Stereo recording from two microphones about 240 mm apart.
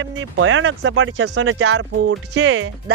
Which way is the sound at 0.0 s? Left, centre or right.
Right.